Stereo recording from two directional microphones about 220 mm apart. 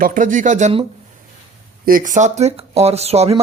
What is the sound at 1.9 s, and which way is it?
Speech, 40° right (ahead or behind).